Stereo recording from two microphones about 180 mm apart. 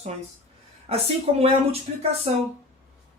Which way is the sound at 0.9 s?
35° right (ahead or behind).